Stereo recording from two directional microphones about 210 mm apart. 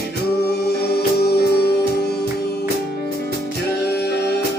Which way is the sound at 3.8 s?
50° left (ahead or behind).